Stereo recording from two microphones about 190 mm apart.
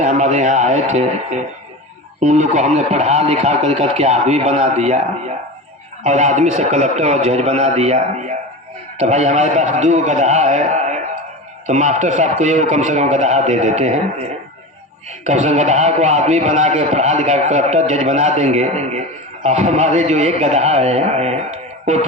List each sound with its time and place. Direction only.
0.0 s a man's voice: 35° right (ahead or behind)